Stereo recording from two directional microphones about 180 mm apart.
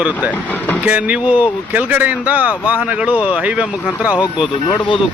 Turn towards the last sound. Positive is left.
turn(degrees=-10)  # may be behind; listen again after turning